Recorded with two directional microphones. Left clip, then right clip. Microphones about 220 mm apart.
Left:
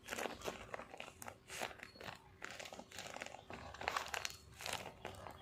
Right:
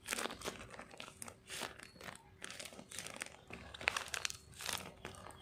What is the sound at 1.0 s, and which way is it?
Biting, 30° right (ahead or behind).